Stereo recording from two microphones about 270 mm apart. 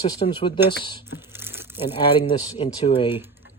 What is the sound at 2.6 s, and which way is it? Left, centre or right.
Speech, left.